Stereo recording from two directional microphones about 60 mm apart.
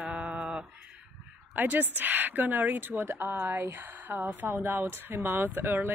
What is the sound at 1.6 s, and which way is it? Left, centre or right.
Speech, right.